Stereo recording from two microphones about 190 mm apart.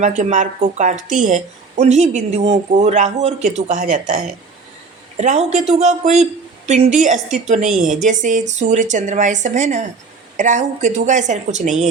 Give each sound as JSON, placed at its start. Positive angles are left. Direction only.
{"t": 0.0, "sound": "speech", "side_deg": -40}